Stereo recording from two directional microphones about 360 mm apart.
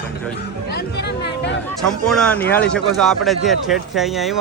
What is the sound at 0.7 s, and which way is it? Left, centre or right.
Speech, left.